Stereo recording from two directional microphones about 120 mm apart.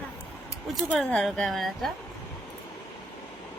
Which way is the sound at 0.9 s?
5° left (ahead or behind).